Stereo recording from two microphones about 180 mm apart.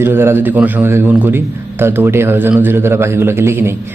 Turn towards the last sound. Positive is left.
turn(degrees=-15)  # may be behind; listen again after turning